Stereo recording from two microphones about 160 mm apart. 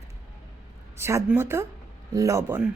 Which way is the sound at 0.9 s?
15° right (ahead or behind).